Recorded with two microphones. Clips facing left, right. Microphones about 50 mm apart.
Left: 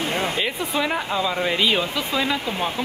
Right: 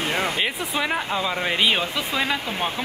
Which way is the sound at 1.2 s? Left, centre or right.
Right.